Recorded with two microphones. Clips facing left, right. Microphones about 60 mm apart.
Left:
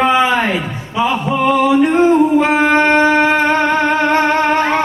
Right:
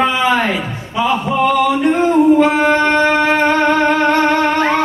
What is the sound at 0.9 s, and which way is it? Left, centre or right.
Music, centre.